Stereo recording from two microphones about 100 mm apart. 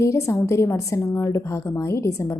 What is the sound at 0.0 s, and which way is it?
A woman's voice, 30° left (ahead or behind).